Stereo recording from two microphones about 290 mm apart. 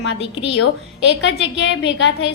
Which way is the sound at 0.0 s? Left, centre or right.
Left.